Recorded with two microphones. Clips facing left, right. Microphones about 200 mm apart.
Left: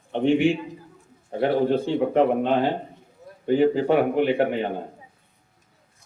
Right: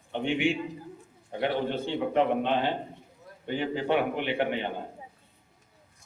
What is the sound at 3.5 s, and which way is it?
A man's voice, 40° left (ahead or behind).